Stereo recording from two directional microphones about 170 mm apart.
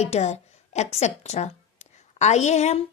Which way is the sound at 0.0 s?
40° left (ahead or behind).